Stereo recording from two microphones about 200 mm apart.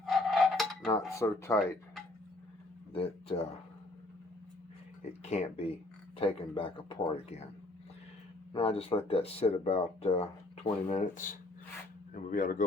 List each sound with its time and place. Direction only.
0.0 s dishes: centre (ahead or behind)
0.9 s cutlery: 15° left (ahead or behind)
2.9 s speech: 30° left (ahead or behind)
5.2 s speech: 35° left (ahead or behind)
8.5 s speech: 30° left (ahead or behind)